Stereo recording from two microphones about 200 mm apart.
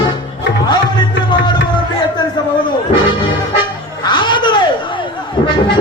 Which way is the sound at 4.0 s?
20° left (ahead or behind).